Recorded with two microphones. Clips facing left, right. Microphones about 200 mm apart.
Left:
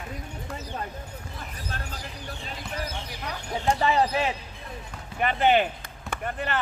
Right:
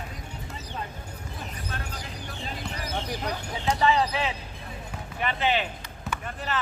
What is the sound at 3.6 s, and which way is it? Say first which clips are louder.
Basketball bounce: even; 45° left (ahead or behind).